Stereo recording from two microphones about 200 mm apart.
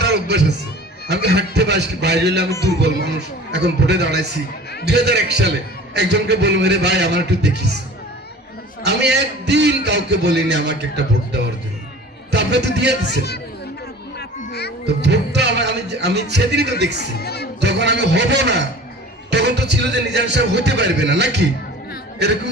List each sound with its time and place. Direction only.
0.0 s music: 55° right (ahead or behind)
1.0 s a man's voice: 55° right (ahead or behind)
2.5 s music: 15° left (ahead or behind)
2.8 s a man's voice: 55° right (ahead or behind)
8.8 s a man's voice: 55° right (ahead or behind)
13.1 s speech: 55° left (ahead or behind)
14.2 s a sound: 55° left (ahead or behind)
14.8 s a man's voice: 55° right (ahead or behind)
17.2 s speech: 50° left (ahead or behind)
17.6 s a man's voice: 60° right (ahead or behind)